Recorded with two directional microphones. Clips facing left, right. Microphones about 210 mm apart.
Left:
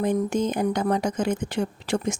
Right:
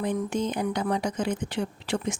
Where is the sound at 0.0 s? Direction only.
45° left (ahead or behind).